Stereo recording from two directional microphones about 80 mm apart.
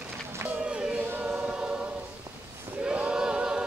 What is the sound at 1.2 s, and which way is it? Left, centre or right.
Choir, centre.